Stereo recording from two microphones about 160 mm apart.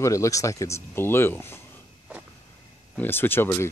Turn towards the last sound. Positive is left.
turn(degrees=15)  # may be behind; listen again after turning